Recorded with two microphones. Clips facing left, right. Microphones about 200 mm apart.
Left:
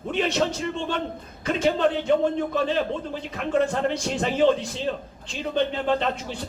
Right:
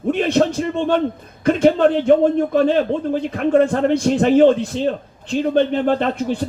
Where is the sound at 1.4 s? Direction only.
55° right (ahead or behind).